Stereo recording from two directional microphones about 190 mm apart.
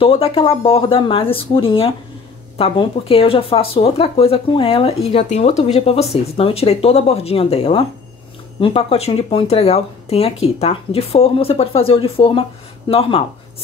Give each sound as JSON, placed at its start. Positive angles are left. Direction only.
{"t": 0.0, "sound": "speech", "side_deg": 30}